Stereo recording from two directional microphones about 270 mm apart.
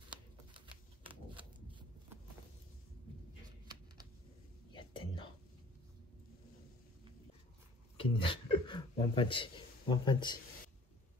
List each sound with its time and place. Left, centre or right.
0.6 s typewriter: centre
4.7 s whispering: centre
8.0 s a man's voice: centre